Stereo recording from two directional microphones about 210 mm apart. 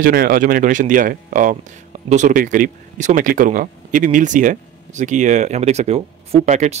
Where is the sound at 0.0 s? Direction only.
45° right (ahead or behind).